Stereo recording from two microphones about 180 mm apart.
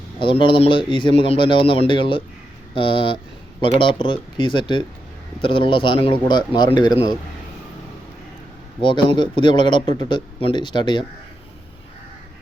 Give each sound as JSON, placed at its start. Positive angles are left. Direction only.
{"t": 0.2, "sound": "speech", "side_deg": 30}
{"t": 8.8, "sound": "speech", "side_deg": 25}